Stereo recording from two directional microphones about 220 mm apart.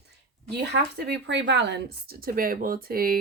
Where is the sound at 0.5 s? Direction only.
50° right (ahead or behind).